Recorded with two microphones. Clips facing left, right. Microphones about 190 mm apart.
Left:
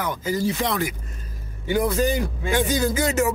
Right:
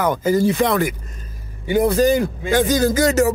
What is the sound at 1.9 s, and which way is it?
A man's voice, 35° right (ahead or behind).